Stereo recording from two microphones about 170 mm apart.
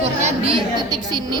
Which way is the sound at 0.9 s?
25° right (ahead or behind).